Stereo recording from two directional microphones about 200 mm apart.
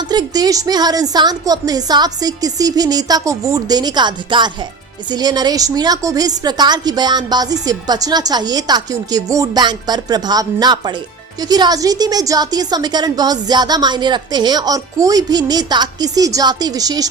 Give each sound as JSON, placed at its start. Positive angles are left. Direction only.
{"t": 0.1, "sound": "a woman's voice", "side_deg": -20}